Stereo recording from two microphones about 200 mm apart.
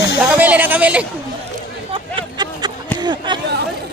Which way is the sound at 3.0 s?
20° right (ahead or behind).